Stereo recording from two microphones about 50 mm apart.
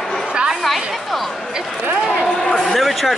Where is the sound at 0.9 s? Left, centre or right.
Centre.